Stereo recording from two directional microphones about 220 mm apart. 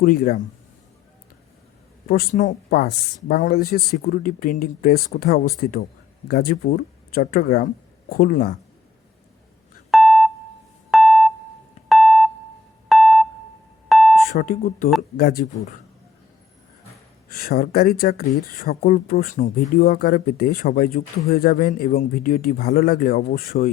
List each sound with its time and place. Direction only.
0.0 s speech: 40° left (ahead or behind)
2.0 s speech: 40° left (ahead or behind)
9.9 s a sound: centre (ahead or behind)
10.9 s keyboard: centre (ahead or behind)
12.9 s beep: centre (ahead or behind)
13.8 s a sound: centre (ahead or behind)
14.3 s speech: 35° left (ahead or behind)
17.2 s speech: 45° left (ahead or behind)